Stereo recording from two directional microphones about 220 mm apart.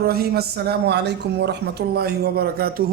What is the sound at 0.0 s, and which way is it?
A man's voice, 45° right (ahead or behind).